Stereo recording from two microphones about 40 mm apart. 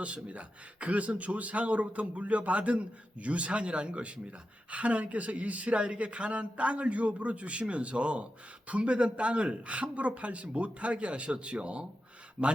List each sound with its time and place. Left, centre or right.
0.0 s a man's voice: right